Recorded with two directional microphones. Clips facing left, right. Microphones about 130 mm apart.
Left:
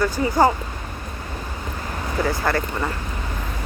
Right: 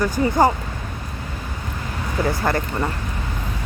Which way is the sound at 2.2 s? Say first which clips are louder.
Right 1 dB; 25° right (ahead or behind).